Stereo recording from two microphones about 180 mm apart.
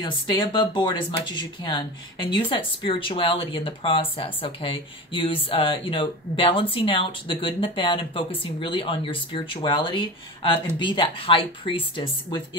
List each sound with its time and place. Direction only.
0.0 s speech: 25° left (ahead or behind)